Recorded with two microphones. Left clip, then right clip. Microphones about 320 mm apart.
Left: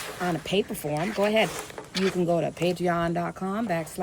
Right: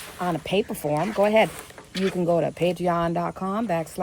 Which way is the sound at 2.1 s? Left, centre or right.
Centre.